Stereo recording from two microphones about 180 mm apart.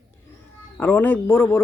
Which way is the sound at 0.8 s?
10° left (ahead or behind).